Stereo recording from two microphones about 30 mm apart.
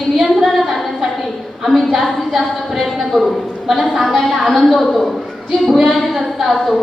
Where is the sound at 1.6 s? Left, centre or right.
Centre.